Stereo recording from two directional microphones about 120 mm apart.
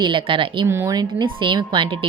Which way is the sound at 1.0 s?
40° right (ahead or behind).